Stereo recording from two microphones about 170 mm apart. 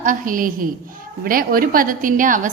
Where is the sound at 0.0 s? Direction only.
50° right (ahead or behind).